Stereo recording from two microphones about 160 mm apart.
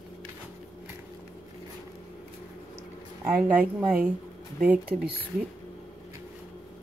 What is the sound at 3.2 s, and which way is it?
A woman's voice, 10° right (ahead or behind).